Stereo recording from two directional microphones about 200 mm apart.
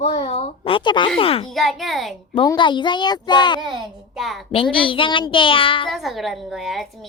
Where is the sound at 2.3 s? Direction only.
20° left (ahead or behind).